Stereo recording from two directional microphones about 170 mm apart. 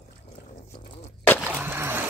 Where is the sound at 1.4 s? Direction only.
15° right (ahead or behind).